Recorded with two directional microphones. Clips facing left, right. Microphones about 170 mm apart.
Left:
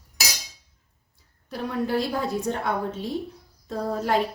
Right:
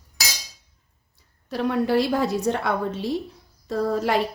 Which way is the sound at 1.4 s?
80° right.